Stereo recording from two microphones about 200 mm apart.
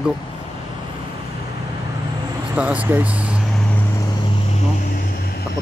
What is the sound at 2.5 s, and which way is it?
Speech, 5° right (ahead or behind).